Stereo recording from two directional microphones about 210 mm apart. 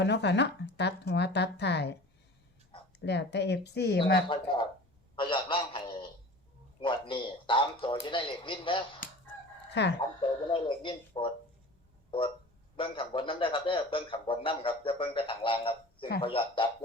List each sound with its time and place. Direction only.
0.0 s speech: 55° left (ahead or behind)
3.0 s speech: 55° left (ahead or behind)
4.3 s a man's voice: 25° left (ahead or behind)
9.8 s speech: 55° left (ahead or behind)
10.2 s a man's voice: 25° left (ahead or behind)
12.7 s a man's voice: 25° left (ahead or behind)